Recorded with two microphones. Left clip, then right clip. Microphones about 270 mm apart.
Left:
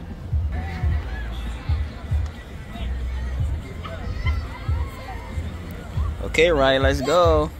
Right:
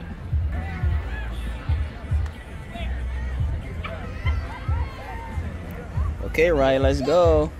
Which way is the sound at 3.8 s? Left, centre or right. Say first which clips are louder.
Even; left.